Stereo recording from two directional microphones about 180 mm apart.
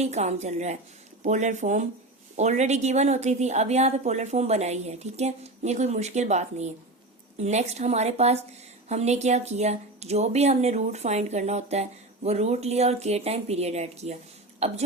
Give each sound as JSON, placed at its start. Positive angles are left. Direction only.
{"t": 0.0, "sound": "speech", "side_deg": -40}